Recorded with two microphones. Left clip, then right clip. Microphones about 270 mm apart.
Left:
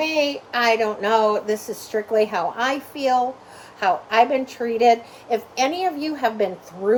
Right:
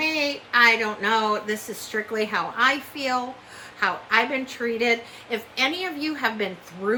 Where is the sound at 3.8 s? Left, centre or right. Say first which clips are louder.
Left 4 dB; centre.